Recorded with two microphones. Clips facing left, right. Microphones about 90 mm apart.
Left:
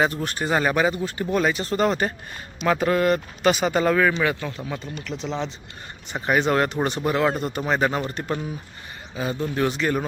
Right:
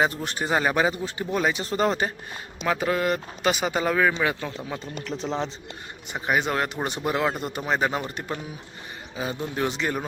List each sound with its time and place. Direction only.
0.0 s speech: 20° right (ahead or behind)
2.6 s speech: 5° right (ahead or behind); by 4.8 s 25° right (ahead or behind)
5.0 s speech: 40° right (ahead or behind)
6.1 s speech: 5° right (ahead or behind)